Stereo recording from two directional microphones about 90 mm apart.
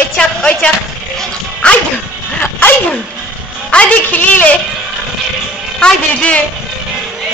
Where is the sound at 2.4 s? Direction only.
20° left (ahead or behind).